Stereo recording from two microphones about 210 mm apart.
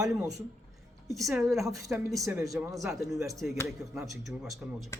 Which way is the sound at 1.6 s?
15° right (ahead or behind).